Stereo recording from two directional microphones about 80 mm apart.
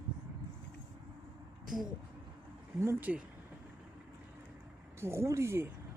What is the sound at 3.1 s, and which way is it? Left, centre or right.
Speech, centre.